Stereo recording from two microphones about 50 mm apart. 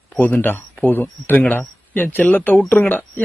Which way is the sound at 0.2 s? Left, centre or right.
Left.